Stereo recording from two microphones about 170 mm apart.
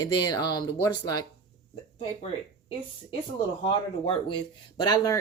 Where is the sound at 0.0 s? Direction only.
25° left (ahead or behind).